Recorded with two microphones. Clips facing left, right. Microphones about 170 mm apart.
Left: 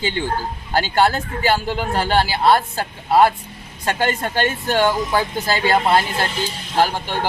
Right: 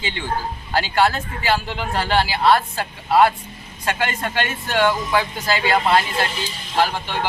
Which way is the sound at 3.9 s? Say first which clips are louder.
Left 3 dB; 40° left (ahead or behind).